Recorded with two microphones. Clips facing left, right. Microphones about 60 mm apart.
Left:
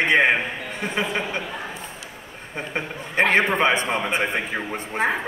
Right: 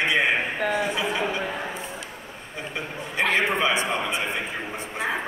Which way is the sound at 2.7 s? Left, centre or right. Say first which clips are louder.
Left 5 dB; left.